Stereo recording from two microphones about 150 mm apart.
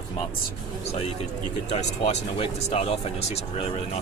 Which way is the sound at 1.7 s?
45° left (ahead or behind).